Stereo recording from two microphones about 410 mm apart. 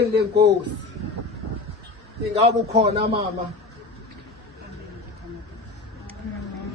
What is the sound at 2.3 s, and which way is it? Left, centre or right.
Speech, centre.